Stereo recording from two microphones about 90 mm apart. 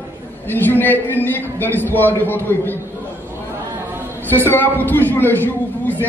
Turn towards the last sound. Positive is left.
turn(degrees=20)  # may be behind; listen again after turning